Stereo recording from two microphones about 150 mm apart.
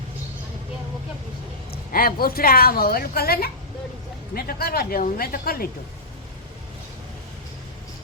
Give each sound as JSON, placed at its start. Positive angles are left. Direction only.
{"t": 1.7, "sound": "a woman's voice", "side_deg": 75}